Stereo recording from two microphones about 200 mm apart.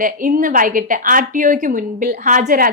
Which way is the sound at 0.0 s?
40° right (ahead or behind).